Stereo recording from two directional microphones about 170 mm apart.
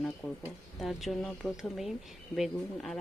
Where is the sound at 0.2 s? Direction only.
10° left (ahead or behind).